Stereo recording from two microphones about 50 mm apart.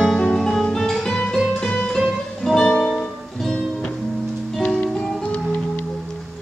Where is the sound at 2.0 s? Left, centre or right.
Centre.